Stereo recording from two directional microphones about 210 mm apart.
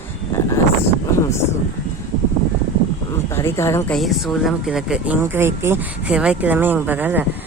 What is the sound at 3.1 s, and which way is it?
Speech, 10° left (ahead or behind).